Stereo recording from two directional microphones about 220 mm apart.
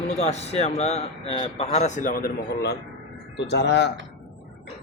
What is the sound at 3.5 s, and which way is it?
Speech, 50° left (ahead or behind).